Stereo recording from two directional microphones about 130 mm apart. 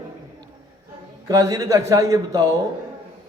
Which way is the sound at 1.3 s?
25° right (ahead or behind).